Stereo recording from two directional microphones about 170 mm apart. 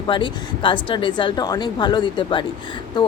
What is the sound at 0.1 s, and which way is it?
Speech, 30° left (ahead or behind).